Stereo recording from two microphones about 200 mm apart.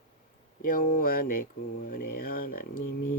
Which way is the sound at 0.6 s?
45° left (ahead or behind).